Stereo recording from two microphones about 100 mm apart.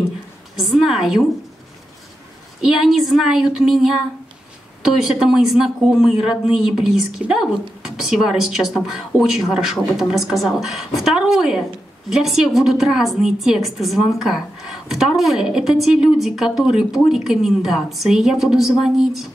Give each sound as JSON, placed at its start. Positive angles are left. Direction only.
{"t": 0.6, "sound": "a woman's voice", "side_deg": 0}
{"t": 2.6, "sound": "a woman's voice", "side_deg": -5}